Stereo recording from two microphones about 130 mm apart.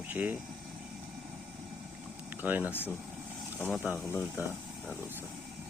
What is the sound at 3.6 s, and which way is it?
Speech, centre (ahead or behind).